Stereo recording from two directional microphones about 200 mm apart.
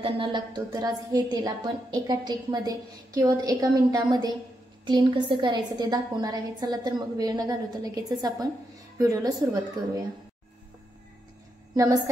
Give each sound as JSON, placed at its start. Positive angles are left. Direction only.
{"t": 0.0, "sound": "a woman's voice", "side_deg": -25}
{"t": 11.7, "sound": "a woman's voice", "side_deg": -15}